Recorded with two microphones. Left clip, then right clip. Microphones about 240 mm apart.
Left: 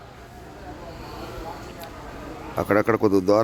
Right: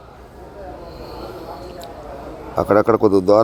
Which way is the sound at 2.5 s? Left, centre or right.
Centre.